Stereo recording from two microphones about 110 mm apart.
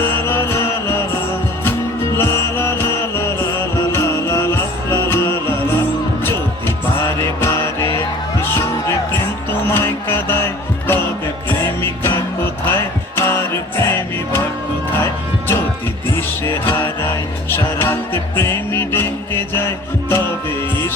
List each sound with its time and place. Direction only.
0.0 s music: 20° left (ahead or behind)
2.1 s music: 25° left (ahead or behind)